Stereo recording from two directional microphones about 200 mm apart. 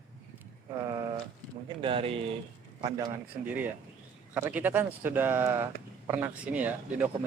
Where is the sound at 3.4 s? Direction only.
10° right (ahead or behind).